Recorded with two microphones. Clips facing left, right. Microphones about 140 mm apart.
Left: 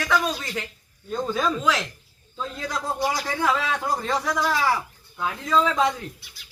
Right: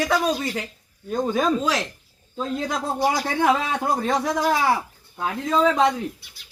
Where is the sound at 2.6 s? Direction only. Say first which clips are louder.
Right 2 dB; 55° right (ahead or behind).